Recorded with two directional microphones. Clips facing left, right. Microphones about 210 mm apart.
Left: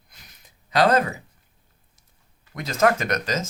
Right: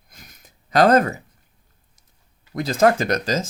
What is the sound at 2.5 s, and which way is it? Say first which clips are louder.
Speech: right 4 dB; 30° right (ahead or behind).